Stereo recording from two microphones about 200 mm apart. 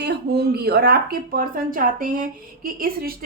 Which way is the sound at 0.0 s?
55° right (ahead or behind).